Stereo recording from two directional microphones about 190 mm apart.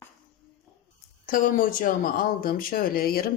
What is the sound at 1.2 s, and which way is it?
Speech, 45° left (ahead or behind).